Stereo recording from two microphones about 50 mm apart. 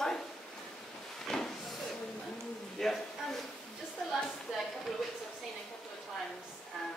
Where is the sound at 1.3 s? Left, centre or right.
Centre.